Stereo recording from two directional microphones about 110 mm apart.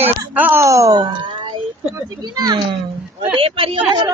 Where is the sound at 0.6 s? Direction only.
30° right (ahead or behind).